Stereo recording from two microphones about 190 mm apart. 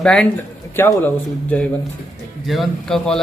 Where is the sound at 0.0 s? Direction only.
5° left (ahead or behind).